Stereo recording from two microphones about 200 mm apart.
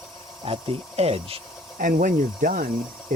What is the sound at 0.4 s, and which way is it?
Speech, 30° right (ahead or behind).